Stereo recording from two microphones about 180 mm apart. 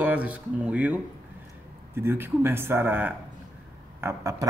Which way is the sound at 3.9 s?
15° right (ahead or behind).